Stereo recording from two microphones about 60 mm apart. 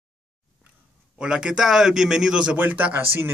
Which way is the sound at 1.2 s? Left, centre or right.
Centre.